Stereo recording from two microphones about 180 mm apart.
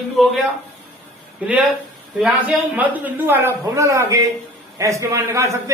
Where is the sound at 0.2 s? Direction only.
Centre (ahead or behind).